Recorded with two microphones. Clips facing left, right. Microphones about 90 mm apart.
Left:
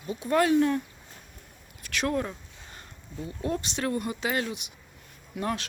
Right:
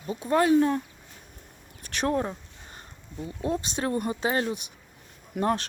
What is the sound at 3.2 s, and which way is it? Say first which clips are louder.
Speech: right 2 dB; 25° right (ahead or behind).